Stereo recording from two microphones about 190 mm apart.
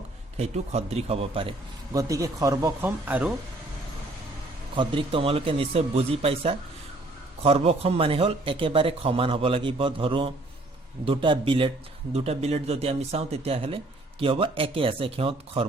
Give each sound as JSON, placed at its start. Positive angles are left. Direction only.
{"t": 0.3, "sound": "a man's voice", "side_deg": -35}
{"t": 4.7, "sound": "speech", "side_deg": -25}